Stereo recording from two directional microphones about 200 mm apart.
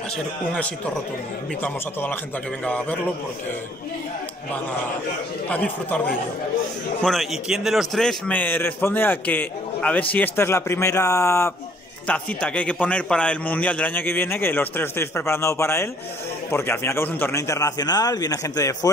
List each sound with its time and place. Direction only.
1.6 s a man's voice: 10° left (ahead or behind)
5.5 s a man's voice: 5° left (ahead or behind)